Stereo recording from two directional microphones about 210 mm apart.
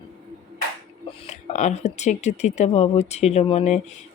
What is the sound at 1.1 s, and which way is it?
Speech, 35° left (ahead or behind).